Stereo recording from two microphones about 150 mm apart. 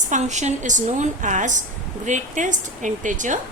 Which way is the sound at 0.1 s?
50° right (ahead or behind).